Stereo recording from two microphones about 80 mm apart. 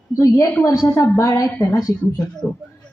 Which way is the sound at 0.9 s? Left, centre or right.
Left.